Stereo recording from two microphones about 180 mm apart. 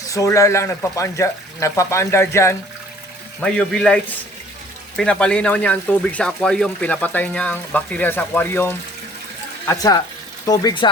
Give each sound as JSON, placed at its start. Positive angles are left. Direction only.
{"t": 0.0, "sound": "speech", "side_deg": 20}
{"t": 4.9, "sound": "speech", "side_deg": 5}